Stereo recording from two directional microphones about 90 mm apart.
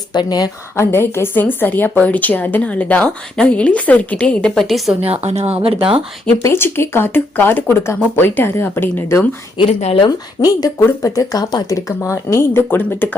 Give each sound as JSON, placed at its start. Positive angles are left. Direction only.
{"t": 0.1, "sound": "a woman's voice", "side_deg": 50}
{"t": 0.8, "sound": "a woman's voice", "side_deg": 25}
{"t": 5.5, "sound": "speech", "side_deg": -90}
{"t": 6.4, "sound": "speech", "side_deg": 25}
{"t": 9.6, "sound": "speech", "side_deg": 85}
{"t": 10.4, "sound": "speech", "side_deg": 40}